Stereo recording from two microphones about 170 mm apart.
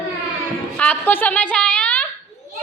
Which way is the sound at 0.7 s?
10° left (ahead or behind).